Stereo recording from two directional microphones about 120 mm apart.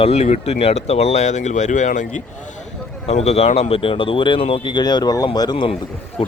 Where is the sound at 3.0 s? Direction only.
60° left (ahead or behind); by 5.3 s 30° left (ahead or behind).